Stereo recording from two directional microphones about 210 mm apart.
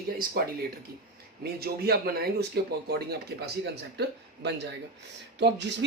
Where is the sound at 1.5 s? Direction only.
45° right (ahead or behind).